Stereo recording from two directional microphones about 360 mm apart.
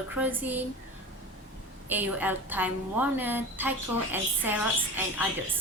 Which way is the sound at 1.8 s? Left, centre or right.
Centre.